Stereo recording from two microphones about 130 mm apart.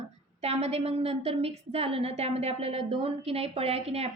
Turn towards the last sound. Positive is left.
turn(degrees=-50)  # may be behind; listen again after turning